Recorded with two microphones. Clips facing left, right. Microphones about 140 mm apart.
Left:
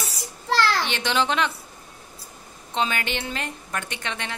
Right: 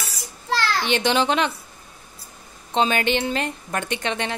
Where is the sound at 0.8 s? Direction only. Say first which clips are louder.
Right 4 dB; 15° right (ahead or behind).